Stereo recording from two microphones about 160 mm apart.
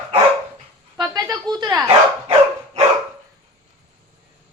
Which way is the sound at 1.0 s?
25° right (ahead or behind).